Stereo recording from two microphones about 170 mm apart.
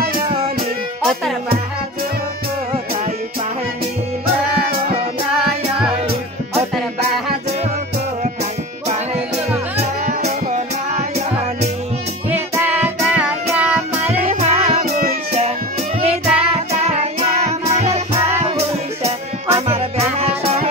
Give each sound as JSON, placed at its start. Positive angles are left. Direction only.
{"t": 0.3, "sound": "music", "side_deg": -35}
{"t": 8.8, "sound": "music", "side_deg": -40}
{"t": 12.3, "sound": "music", "side_deg": -10}
{"t": 14.2, "sound": "music", "side_deg": -40}
{"t": 16.0, "sound": "music", "side_deg": -40}